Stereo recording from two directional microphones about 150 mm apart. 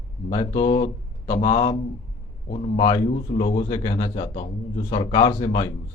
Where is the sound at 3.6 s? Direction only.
30° left (ahead or behind).